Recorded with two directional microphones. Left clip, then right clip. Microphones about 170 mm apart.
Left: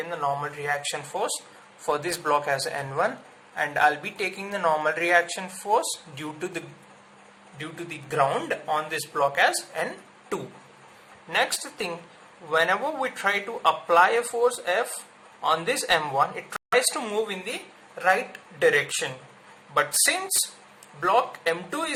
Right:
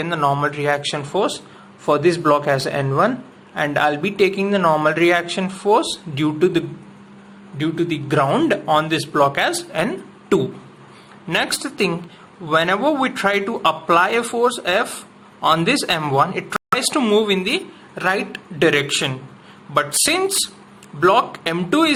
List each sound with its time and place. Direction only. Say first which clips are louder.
0.0 s speech: right 9 dB; 25° right (ahead or behind)
7.6 s speech: right 15 dB; 15° right (ahead or behind)
11.6 s speech: right 11 dB; 10° right (ahead or behind)